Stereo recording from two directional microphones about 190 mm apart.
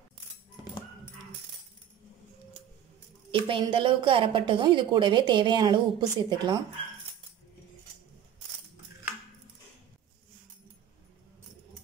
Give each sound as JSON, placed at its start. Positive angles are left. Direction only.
{"t": 3.3, "sound": "a woman's voice", "side_deg": -25}